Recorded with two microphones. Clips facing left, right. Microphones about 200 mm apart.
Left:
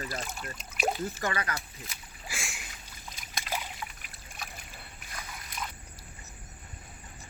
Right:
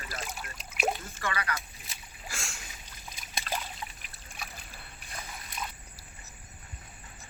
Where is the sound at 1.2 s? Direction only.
30° left (ahead or behind).